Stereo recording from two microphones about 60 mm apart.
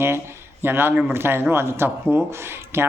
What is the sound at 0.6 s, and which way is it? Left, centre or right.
A woman's voice, right.